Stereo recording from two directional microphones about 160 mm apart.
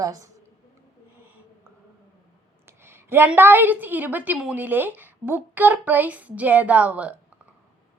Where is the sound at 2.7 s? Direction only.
15° right (ahead or behind).